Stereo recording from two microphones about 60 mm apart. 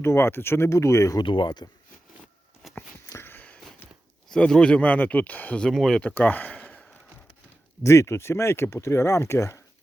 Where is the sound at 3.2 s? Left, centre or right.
Left.